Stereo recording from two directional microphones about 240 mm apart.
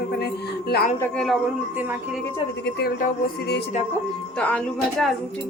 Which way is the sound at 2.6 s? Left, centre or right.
Left.